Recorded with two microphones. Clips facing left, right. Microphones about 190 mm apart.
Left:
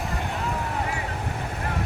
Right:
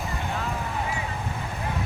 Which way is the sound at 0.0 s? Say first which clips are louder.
Left 1 dB; centre (ahead or behind).